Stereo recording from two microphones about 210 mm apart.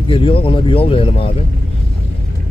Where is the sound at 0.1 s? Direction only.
25° left (ahead or behind).